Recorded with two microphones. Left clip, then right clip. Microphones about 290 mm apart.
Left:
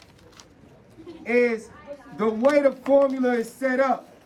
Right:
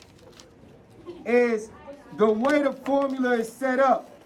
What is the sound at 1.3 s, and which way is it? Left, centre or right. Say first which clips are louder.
A man's voice: even; centre.